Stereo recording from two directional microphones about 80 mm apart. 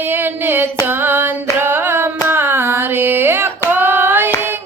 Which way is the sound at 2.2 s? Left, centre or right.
Right.